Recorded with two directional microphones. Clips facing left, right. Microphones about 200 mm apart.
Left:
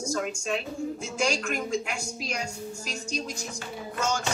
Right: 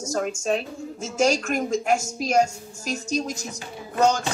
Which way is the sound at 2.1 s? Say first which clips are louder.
Right 14 dB; 45° right (ahead or behind).